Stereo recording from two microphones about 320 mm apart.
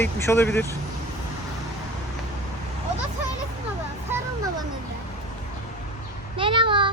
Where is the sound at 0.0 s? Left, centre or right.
Centre.